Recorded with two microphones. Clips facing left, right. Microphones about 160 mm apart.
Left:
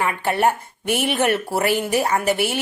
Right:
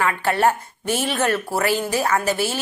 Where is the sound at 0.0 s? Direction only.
20° left (ahead or behind).